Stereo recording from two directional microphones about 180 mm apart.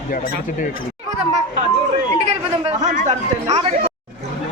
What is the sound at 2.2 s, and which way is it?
Speech, 40° right (ahead or behind).